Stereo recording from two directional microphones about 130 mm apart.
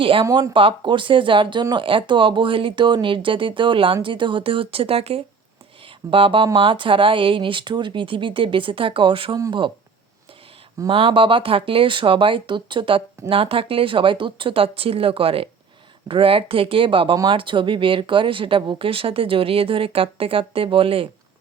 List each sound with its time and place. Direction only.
0.0 s speech: 45° right (ahead or behind)
0.3 s speech: 25° right (ahead or behind)
0.5 s speech: 40° right (ahead or behind)
10.9 s speech: 45° right (ahead or behind)